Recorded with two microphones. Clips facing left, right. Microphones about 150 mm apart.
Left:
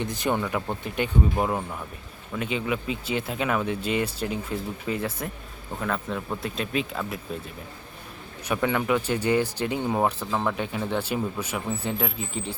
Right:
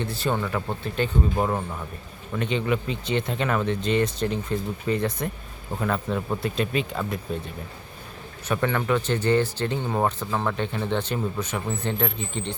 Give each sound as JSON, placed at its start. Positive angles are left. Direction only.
{"t": 0.0, "sound": "speech", "side_deg": 15}
{"t": 8.4, "sound": "speech", "side_deg": 10}